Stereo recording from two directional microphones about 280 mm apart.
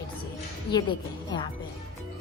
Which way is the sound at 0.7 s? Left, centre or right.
Left.